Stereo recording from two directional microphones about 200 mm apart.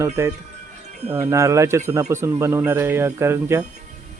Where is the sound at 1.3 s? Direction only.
15° right (ahead or behind).